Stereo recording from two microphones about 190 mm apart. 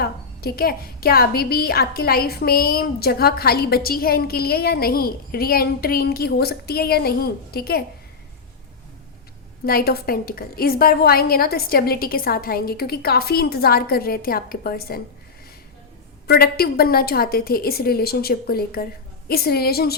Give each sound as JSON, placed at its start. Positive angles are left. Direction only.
{"t": 0.0, "sound": "a woman's voice", "side_deg": 55}
{"t": 9.6, "sound": "a woman's voice", "side_deg": 55}
{"t": 16.2, "sound": "a woman's voice", "side_deg": 55}